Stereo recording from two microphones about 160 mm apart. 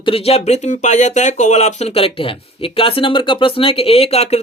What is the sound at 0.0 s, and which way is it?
Speech, 35° left (ahead or behind).